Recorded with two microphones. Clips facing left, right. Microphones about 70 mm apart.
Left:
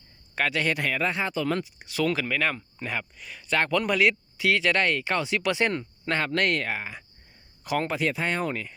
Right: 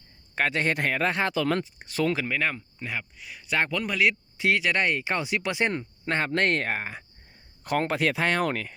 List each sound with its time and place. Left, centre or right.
0.3 s speech: right
1.0 s speech: right
1.5 s speech: right
2.2 s speech: centre
2.6 s speech: centre
4.4 s speech: right